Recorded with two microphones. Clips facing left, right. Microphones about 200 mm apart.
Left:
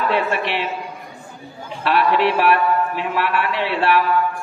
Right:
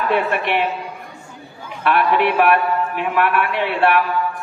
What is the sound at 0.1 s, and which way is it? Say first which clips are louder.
Speech: right 2 dB; 55° right (ahead or behind).